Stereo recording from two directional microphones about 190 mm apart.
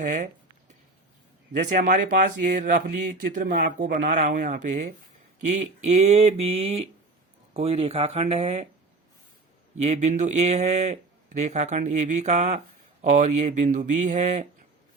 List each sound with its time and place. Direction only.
0.0 s speech: 40° right (ahead or behind)
1.5 s speech: 40° right (ahead or behind)
9.8 s speech: 35° right (ahead or behind)